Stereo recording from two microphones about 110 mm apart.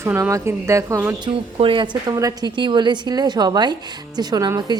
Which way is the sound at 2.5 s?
45° right (ahead or behind).